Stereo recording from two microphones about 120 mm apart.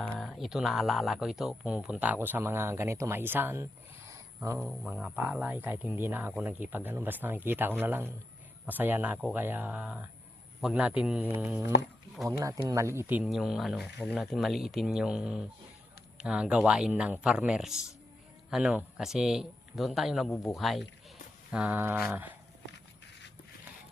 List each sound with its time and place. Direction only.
0.2 s speech: centre (ahead or behind)
12.4 s speech: 25° right (ahead or behind)
13.3 s speech: centre (ahead or behind)
21.5 s speech: 10° right (ahead or behind)